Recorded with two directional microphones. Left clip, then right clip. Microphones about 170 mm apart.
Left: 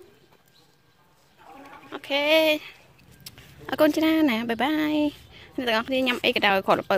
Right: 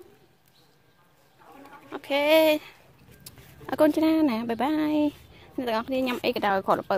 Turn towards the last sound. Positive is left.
turn(degrees=5)  # may be behind; listen again after turning